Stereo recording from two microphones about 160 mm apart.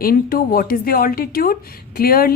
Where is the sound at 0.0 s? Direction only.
65° left (ahead or behind).